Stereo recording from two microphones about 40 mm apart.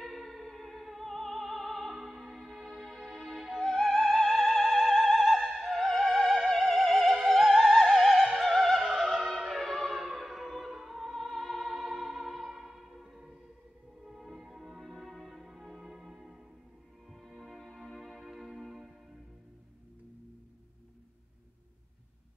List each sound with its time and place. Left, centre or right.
0.0 s music: centre
2.0 s music: centre
7.8 s opera: centre
9.5 s music: centre
15.9 s music: centre
17.1 s music: centre